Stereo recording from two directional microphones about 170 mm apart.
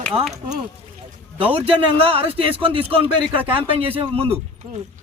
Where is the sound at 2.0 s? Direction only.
35° right (ahead or behind).